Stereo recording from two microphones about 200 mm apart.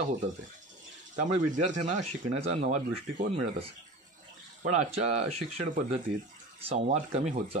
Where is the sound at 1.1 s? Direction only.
35° right (ahead or behind).